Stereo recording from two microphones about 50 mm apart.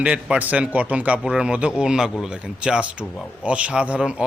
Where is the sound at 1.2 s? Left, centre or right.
Centre.